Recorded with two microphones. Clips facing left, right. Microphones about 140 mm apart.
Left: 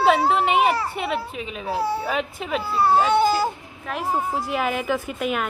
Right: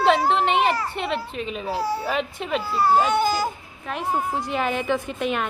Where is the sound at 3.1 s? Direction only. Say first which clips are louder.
Left 3 dB; 30° left (ahead or behind).